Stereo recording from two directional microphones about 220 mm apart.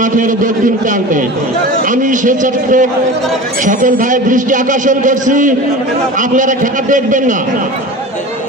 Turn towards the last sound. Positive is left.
turn(degrees=-35)  # may be behind; listen again after turning